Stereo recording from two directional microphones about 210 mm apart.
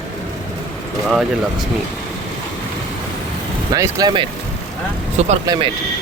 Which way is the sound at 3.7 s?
15° right (ahead or behind).